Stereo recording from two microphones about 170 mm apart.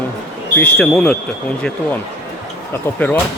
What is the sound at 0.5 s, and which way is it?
Speech, 10° left (ahead or behind).